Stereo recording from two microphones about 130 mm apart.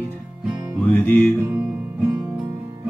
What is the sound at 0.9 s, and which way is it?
Music, 15° left (ahead or behind).